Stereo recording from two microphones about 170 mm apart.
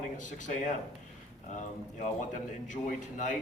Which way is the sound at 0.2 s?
50° left (ahead or behind).